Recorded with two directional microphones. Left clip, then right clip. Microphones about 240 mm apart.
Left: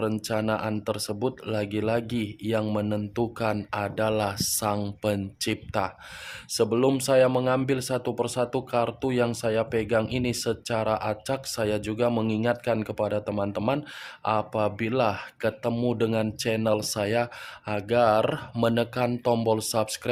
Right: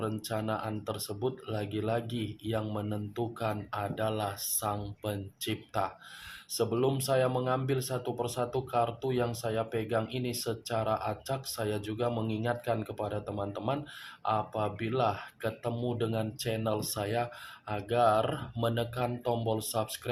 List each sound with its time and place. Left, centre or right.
0.0 s speech: left